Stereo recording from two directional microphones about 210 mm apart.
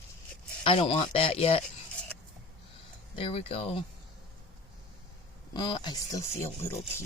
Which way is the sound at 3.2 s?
25° left (ahead or behind).